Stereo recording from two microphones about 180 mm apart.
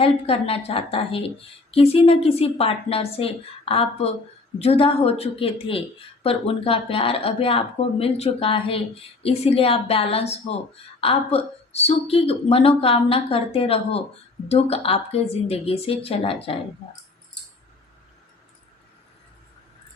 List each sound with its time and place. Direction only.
0.0 s speech: 30° left (ahead or behind)